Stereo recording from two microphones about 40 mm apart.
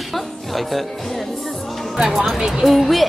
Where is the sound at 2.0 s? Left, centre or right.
Centre.